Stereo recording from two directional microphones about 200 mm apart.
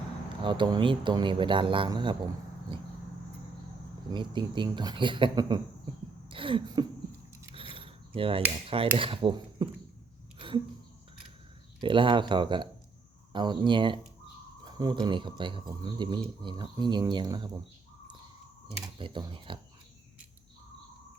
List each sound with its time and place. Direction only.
0.4 s speech: 25° right (ahead or behind)
4.1 s speech: 25° right (ahead or behind)
6.2 s throat clearing: 25° right (ahead or behind)
7.5 s a sound: 25° right (ahead or behind)
8.6 s speech: 30° right (ahead or behind)
10.3 s a sound: 25° right (ahead or behind)
11.8 s speech: 25° right (ahead or behind)
18.9 s speech: 25° right (ahead or behind)